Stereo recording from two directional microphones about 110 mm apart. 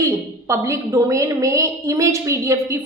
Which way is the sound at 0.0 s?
30° right (ahead or behind).